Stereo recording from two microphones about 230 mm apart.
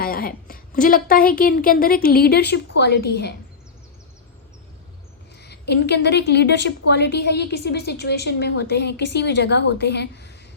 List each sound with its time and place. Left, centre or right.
0.0 s a woman's voice: left
5.4 s a woman's voice: left